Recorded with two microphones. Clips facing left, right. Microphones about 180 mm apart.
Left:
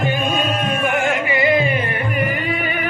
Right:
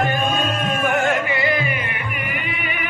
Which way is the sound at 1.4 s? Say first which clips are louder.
Left 5 dB; 25° left (ahead or behind).